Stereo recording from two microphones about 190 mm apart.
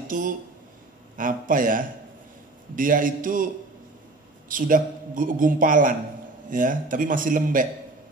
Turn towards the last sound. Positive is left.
turn(degrees=-45)  # may be behind; listen again after turning